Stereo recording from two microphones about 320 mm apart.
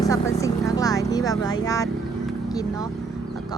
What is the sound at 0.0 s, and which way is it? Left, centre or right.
Speech, centre.